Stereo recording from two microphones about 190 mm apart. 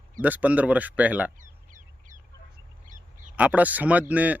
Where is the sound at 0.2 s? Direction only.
10° right (ahead or behind).